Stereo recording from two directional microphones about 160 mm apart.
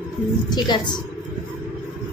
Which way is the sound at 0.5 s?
30° left (ahead or behind).